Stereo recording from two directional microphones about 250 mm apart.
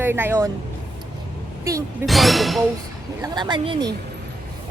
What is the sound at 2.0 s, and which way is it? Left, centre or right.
Speech, centre.